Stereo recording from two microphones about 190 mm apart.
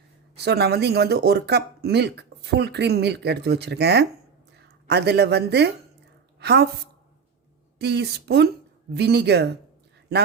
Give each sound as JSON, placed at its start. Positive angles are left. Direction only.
{"t": 0.4, "sound": "a woman's voice", "side_deg": -60}
{"t": 7.8, "sound": "speech", "side_deg": -60}